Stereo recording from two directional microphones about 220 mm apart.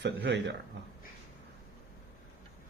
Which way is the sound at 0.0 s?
55° right (ahead or behind).